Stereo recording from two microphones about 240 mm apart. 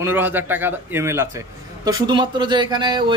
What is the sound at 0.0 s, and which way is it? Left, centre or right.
A man's voice, centre.